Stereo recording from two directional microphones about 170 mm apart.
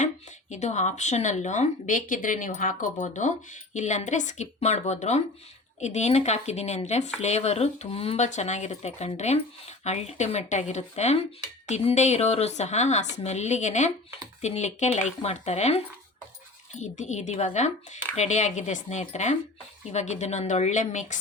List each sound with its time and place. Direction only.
0.5 s speech: 45° left (ahead or behind)